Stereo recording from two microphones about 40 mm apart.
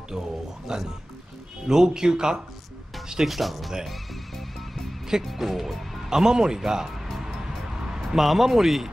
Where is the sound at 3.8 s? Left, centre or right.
Centre.